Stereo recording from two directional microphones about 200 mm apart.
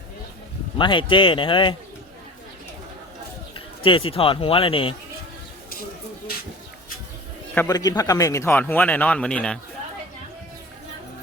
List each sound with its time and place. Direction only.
0.8 s speech: 25° left (ahead or behind)
3.8 s speech: 25° left (ahead or behind)
7.5 s speech: 15° left (ahead or behind)